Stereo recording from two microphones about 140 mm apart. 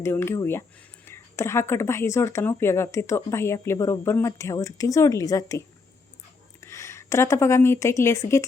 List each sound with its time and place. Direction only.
0.0 s speech: 20° left (ahead or behind)